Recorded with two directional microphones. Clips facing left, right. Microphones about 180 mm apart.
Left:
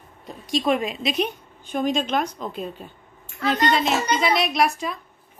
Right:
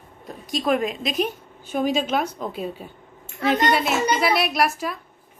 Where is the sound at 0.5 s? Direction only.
Centre (ahead or behind).